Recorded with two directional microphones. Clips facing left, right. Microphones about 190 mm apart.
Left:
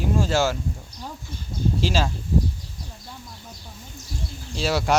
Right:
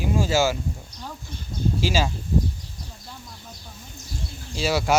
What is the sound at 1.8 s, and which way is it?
Speech, 5° right (ahead or behind).